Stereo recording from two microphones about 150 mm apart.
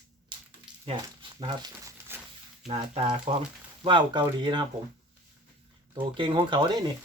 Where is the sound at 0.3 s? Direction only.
30° right (ahead or behind).